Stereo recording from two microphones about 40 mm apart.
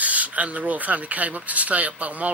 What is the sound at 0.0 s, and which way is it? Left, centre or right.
Speech, right.